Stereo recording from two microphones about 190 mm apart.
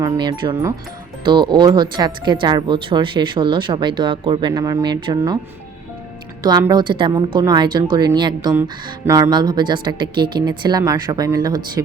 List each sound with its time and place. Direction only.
0.0 s speech: 20° right (ahead or behind)
6.4 s speech: 20° right (ahead or behind)